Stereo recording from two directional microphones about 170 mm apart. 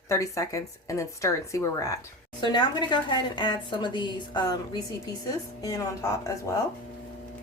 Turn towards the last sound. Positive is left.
turn(degrees=20)  # may be behind; listen again after turning